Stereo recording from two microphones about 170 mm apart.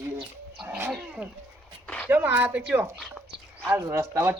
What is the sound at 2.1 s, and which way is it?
A woman's voice, 10° right (ahead or behind).